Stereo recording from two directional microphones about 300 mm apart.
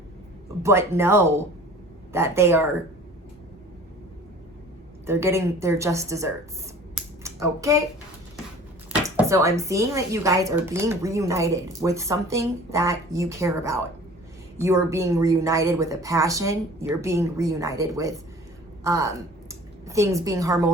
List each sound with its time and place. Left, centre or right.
0.6 s speech: centre
5.0 s speech: centre
6.9 s a sound: centre
8.9 s a woman's voice: centre